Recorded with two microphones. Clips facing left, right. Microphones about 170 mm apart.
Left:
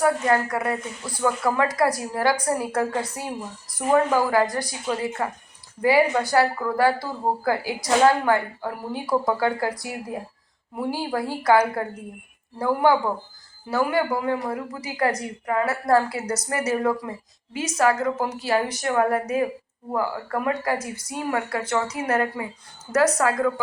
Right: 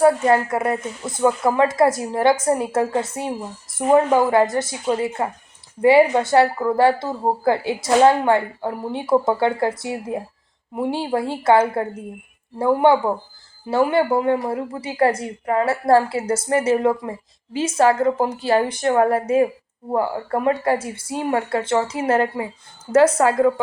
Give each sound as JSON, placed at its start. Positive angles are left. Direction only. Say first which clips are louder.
{"t": 0.0, "sound": "speech", "louder": "right 5 dB", "side_deg": -25}